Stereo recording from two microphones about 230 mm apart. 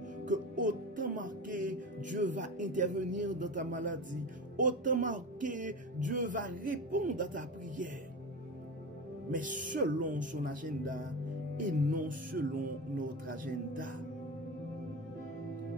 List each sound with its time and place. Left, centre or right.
0.3 s music: right
4.6 s speech: right
9.3 s speech: right